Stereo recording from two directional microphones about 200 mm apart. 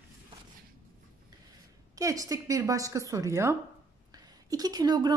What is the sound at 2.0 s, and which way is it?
A woman's voice, 15° right (ahead or behind).